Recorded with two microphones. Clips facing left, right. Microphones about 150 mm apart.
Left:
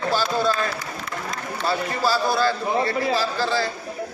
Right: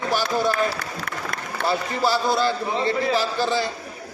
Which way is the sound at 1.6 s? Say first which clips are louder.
Right 1 dB; 20° right (ahead or behind).